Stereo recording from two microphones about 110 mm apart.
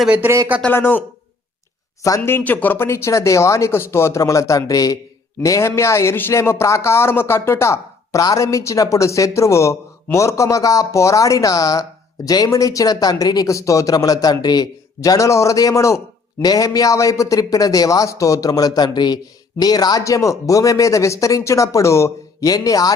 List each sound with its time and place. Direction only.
0.0 s speech: 10° right (ahead or behind)
0.7 s speech: 20° left (ahead or behind)
2.0 s speech: 25° left (ahead or behind)